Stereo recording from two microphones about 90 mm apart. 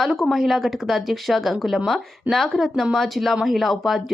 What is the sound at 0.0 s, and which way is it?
Speech, centre (ahead or behind).